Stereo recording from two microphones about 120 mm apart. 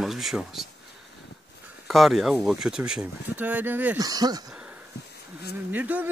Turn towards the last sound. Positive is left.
turn(degrees=-15)  # may be behind; listen again after turning